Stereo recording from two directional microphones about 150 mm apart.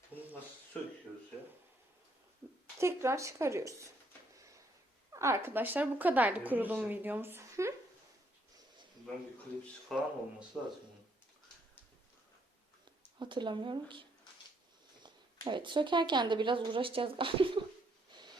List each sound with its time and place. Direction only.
0.1 s a sound: 40° right (ahead or behind)
2.7 s speech: 20° right (ahead or behind)
5.1 s a woman's voice: 20° right (ahead or behind)
9.9 s speech: centre (ahead or behind)
13.1 s speech: 30° right (ahead or behind)
15.4 s speech: 30° right (ahead or behind)
18.1 s a sound: 30° right (ahead or behind)